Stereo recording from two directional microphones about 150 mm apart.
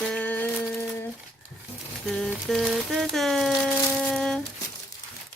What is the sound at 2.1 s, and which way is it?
Speech, centre (ahead or behind).